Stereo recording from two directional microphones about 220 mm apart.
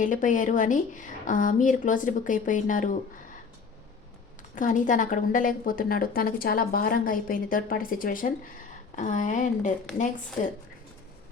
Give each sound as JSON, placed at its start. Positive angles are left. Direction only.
{"t": 0.0, "sound": "a woman's voice", "side_deg": 35}
{"t": 4.5, "sound": "a woman's voice", "side_deg": 35}